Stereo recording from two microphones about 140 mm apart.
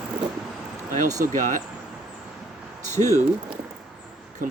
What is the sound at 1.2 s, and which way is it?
Speech, 70° right (ahead or behind).